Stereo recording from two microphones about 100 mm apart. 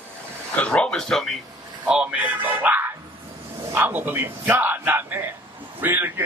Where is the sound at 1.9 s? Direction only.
10° right (ahead or behind).